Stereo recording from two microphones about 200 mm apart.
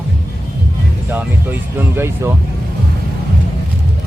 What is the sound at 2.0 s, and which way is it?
Speech, 10° right (ahead or behind).